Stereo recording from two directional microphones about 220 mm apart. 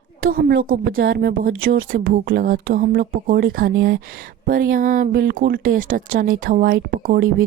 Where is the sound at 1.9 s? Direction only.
40° right (ahead or behind).